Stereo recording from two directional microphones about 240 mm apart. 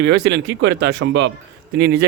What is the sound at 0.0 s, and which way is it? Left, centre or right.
Speech, right.